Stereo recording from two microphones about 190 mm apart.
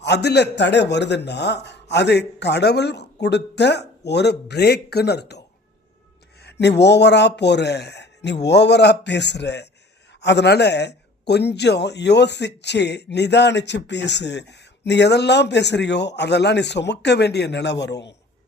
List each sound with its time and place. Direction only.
0.0 s a man's voice: 60° left (ahead or behind)
6.4 s a man's voice: 65° left (ahead or behind)